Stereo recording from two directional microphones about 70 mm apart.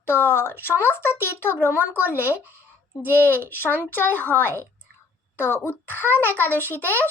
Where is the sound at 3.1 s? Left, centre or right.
Left.